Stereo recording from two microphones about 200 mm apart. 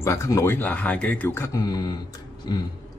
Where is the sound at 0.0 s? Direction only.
15° left (ahead or behind).